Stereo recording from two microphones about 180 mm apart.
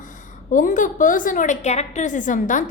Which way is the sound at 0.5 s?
45° left (ahead or behind).